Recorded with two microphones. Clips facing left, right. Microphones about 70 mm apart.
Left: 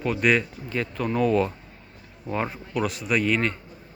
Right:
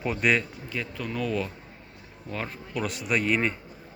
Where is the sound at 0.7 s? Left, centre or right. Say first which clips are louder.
Left 6 dB; left.